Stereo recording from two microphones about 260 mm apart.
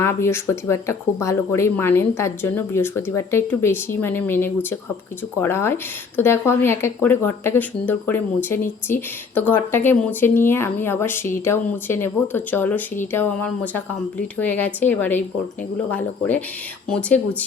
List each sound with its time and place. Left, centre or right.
0.0 s speech: centre